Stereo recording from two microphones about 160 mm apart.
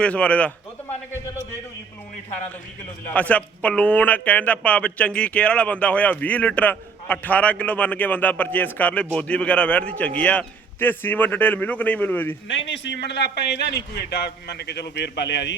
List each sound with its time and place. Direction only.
0.0 s speech: 5° left (ahead or behind)
3.2 s speech: 10° left (ahead or behind)
12.7 s a man's voice: 90° left